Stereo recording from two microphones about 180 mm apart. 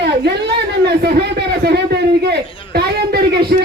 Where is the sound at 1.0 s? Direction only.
60° right (ahead or behind).